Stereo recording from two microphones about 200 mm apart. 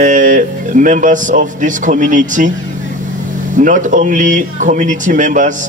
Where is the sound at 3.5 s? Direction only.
40° right (ahead or behind).